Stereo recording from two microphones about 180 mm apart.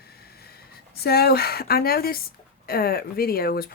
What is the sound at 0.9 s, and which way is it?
Speech, 60° left (ahead or behind).